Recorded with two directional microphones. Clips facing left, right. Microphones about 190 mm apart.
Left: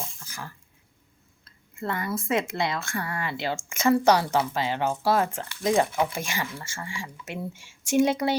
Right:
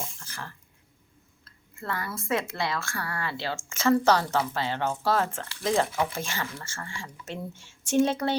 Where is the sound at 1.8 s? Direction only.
20° left (ahead or behind).